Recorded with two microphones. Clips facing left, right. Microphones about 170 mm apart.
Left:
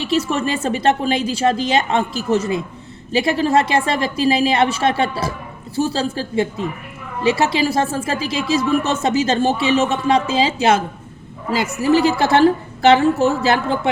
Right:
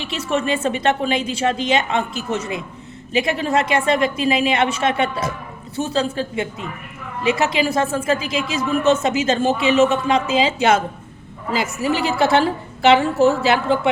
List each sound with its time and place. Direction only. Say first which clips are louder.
0.0 s speech: left 3 dB; 35° left (ahead or behind)
11.9 s speech: left 3 dB; 35° left (ahead or behind)